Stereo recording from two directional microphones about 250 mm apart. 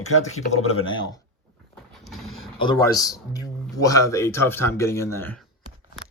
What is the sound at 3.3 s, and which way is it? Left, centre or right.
Speech, centre.